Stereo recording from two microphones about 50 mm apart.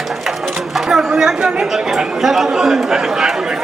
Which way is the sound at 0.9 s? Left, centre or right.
Centre.